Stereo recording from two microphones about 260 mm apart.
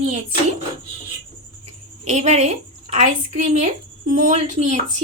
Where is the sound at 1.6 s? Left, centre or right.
Right.